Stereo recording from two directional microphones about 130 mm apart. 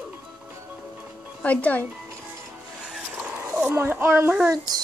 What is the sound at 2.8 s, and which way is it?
Vehicle, 5° right (ahead or behind).